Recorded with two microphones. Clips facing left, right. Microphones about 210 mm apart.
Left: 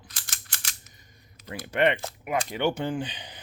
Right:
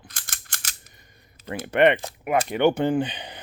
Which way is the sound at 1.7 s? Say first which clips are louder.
Right 5 dB; 60° right (ahead or behind).